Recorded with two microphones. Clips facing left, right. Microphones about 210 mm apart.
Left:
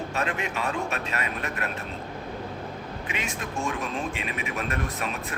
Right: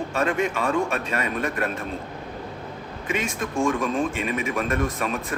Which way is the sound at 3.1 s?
50° right (ahead or behind).